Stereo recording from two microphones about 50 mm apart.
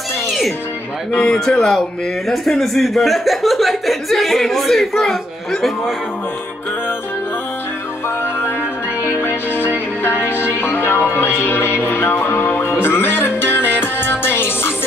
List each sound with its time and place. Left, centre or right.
1.1 s a man's voice: left
1.6 s a man's voice: centre
9.0 s music: left